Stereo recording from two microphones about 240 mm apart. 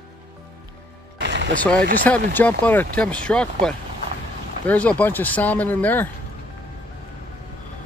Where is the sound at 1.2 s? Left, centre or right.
Right.